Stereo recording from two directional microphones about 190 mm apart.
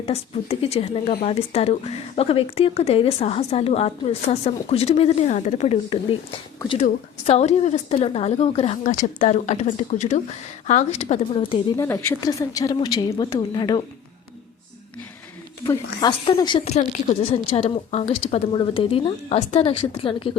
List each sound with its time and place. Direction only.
0.0 s speech: 30° left (ahead or behind)
11.8 s a woman's voice: 15° left (ahead or behind)
15.6 s a woman's voice: 20° left (ahead or behind)